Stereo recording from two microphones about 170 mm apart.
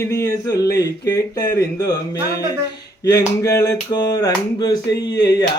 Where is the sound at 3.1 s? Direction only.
20° left (ahead or behind).